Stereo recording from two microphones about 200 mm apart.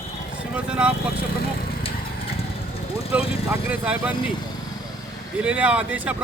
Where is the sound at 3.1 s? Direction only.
5° right (ahead or behind).